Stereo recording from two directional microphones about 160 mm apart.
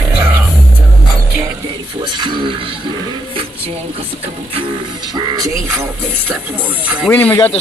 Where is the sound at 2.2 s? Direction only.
30° right (ahead or behind).